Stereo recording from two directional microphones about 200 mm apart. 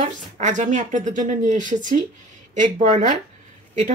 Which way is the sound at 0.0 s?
35° right (ahead or behind).